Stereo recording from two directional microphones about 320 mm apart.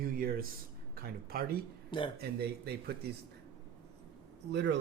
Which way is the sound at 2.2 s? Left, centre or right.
Right.